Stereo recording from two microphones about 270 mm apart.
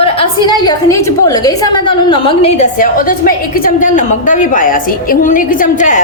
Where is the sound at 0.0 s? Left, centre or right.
Centre.